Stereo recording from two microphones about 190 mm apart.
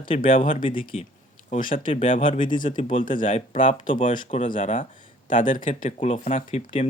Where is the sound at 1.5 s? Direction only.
45° left (ahead or behind).